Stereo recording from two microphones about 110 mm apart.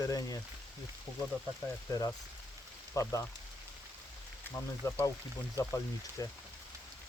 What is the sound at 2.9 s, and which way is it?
Speech, 30° left (ahead or behind).